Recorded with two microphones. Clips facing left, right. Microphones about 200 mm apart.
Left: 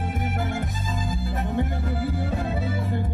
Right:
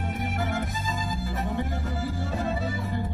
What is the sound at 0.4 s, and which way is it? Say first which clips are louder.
Music: right 1 dB; 50° left (ahead or behind).